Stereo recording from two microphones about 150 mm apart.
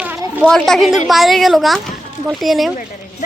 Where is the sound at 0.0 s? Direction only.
15° right (ahead or behind).